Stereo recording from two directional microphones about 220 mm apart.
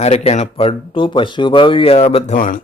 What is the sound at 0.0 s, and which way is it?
Speech, 30° left (ahead or behind).